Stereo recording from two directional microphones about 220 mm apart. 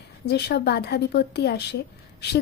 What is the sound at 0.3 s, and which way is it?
A woman's voice, 50° left (ahead or behind).